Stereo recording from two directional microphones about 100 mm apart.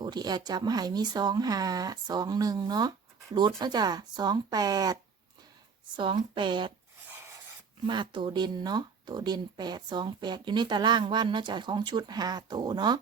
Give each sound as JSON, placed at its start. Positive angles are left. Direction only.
{"t": 0.0, "sound": "speech", "side_deg": -45}
{"t": 6.0, "sound": "speech", "side_deg": -55}
{"t": 7.9, "sound": "speech", "side_deg": -55}